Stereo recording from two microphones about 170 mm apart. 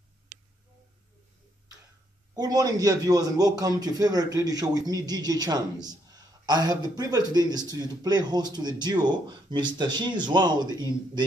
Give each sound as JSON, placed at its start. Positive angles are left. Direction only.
{"t": 2.3, "sound": "a man's voice", "side_deg": -20}